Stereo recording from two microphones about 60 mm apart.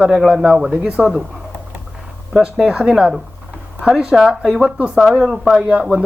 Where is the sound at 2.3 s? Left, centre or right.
Centre.